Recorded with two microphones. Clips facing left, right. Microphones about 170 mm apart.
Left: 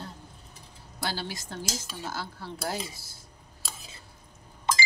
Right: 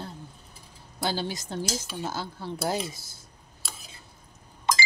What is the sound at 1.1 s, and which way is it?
Speech, 20° right (ahead or behind).